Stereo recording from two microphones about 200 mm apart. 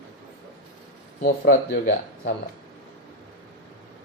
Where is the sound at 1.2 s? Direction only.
55° left (ahead or behind).